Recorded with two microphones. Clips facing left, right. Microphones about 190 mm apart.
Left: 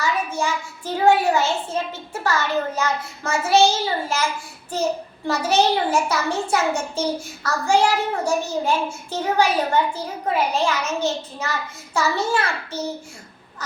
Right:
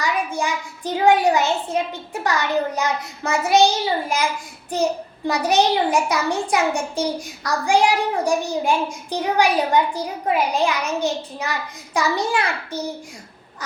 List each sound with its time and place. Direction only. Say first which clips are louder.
0.0 s a child's voice: even; 15° right (ahead or behind)